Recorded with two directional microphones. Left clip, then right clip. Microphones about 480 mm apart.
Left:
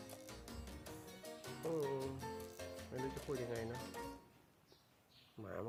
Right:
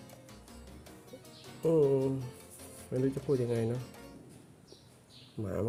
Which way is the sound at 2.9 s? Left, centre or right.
Left.